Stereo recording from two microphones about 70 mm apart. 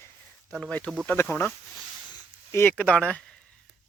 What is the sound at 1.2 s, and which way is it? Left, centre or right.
Speech, left.